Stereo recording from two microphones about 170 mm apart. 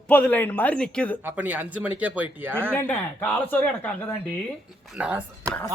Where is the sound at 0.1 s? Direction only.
10° left (ahead or behind).